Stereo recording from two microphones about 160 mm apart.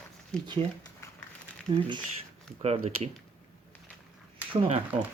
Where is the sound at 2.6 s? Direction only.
40° right (ahead or behind).